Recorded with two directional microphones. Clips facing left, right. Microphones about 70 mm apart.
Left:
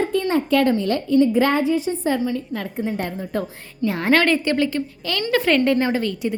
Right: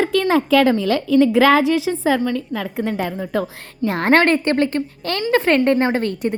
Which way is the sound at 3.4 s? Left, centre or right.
Right.